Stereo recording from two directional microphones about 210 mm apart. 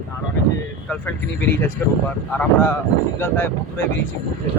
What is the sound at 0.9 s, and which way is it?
Speech, 5° left (ahead or behind).